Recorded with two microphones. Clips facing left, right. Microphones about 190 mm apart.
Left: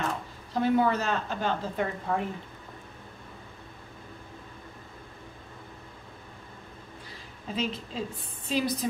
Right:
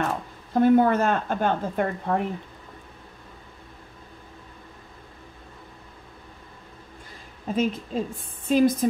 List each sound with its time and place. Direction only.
0.5 s a woman's voice: 50° right (ahead or behind)
7.4 s a woman's voice: 50° right (ahead or behind)